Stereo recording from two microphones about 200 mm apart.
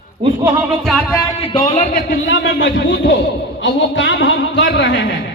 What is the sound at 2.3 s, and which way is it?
A man's voice, 65° left (ahead or behind).